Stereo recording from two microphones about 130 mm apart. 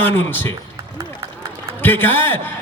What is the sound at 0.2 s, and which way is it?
Speech, 15° left (ahead or behind).